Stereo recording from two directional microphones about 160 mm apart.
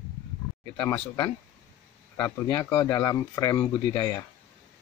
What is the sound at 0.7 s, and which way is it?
Speech, 15° left (ahead or behind).